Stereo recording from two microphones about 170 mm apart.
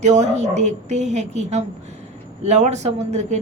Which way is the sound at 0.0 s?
40° right (ahead or behind).